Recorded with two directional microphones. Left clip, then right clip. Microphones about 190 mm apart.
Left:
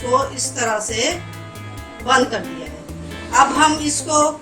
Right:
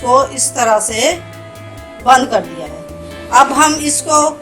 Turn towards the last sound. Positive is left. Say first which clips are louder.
# right 5 dB
turn(degrees=-40)  # may be behind; listen again after turning